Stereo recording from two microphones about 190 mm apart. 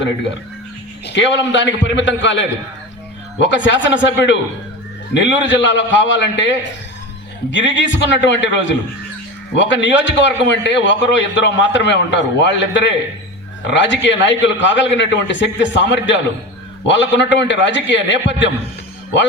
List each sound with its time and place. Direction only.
1.0 s a man's voice: 65° left (ahead or behind)
3.4 s a man's voice: 75° left (ahead or behind)
7.5 s a man's voice: 70° left (ahead or behind)